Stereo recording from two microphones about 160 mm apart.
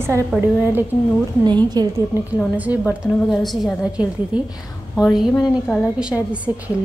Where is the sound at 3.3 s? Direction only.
Centre (ahead or behind).